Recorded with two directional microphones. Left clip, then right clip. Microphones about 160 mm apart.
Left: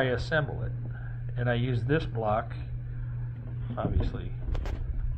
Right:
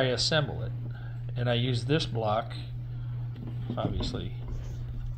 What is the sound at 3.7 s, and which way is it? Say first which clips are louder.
Speech: right 1 dB; 20° right (ahead or behind).